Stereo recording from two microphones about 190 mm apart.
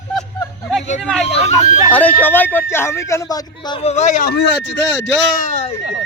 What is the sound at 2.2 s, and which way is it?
Speech, 10° left (ahead or behind).